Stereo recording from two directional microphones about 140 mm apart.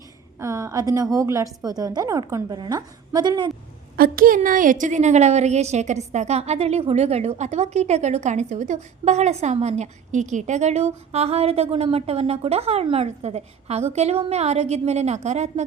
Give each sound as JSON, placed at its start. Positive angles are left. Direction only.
{"t": 0.3, "sound": "a woman's voice", "side_deg": -25}
{"t": 3.9, "sound": "a woman's voice", "side_deg": -90}
{"t": 4.4, "sound": "a woman's voice", "side_deg": -75}